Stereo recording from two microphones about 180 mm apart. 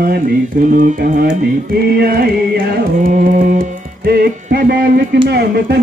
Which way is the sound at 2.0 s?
60° right (ahead or behind).